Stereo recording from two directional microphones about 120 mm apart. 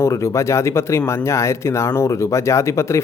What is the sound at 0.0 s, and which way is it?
Speech, 25° left (ahead or behind).